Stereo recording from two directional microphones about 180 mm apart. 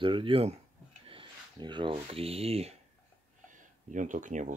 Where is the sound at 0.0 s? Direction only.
30° right (ahead or behind).